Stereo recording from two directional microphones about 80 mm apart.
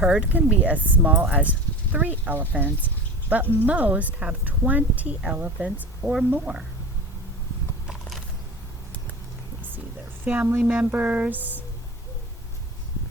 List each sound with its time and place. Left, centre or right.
0.0 s speech: centre
10.2 s speech: right